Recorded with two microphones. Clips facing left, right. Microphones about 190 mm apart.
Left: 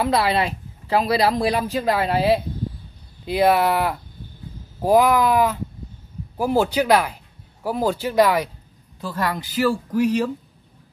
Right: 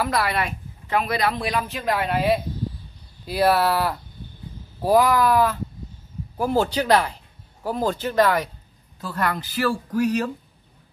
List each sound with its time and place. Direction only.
0.0 s speech: 25° left (ahead or behind)
3.3 s speech: 20° left (ahead or behind)